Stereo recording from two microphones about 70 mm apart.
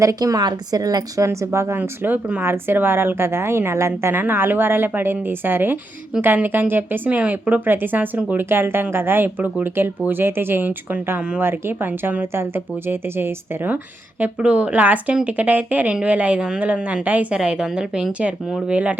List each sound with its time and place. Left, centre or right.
0.0 s a woman's voice: right
1.2 s speech: right
1.8 s a woman's voice: right
14.2 s a woman's voice: centre